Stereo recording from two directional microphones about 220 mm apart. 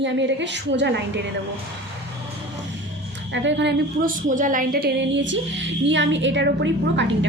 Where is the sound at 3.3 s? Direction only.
55° right (ahead or behind).